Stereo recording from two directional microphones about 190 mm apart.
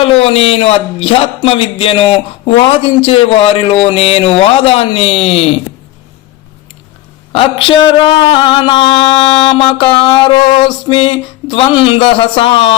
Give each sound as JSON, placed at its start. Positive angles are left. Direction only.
{"t": 0.0, "sound": "speech", "side_deg": 30}
{"t": 7.6, "sound": "speech", "side_deg": 25}